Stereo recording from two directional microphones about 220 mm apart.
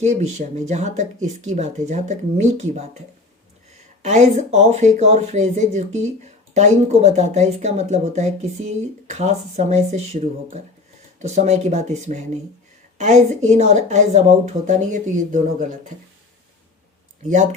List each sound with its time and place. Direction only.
0.0 s speech: 30° right (ahead or behind)
4.0 s speech: 30° right (ahead or behind)
17.2 s speech: 35° right (ahead or behind)